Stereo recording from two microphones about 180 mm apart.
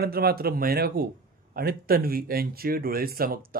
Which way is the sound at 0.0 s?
60° right (ahead or behind).